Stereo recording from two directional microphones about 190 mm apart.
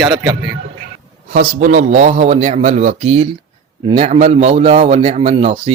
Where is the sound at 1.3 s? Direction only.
40° right (ahead or behind).